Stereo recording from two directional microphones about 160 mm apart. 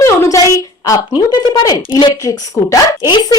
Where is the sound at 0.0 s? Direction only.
20° left (ahead or behind).